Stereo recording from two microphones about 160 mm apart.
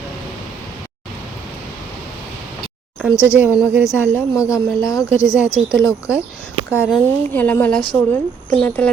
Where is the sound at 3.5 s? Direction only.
5° right (ahead or behind).